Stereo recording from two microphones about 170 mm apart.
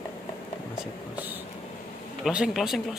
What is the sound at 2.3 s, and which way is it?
Speech, 5° right (ahead or behind).